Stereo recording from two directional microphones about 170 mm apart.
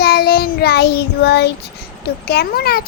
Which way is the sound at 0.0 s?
65° left (ahead or behind).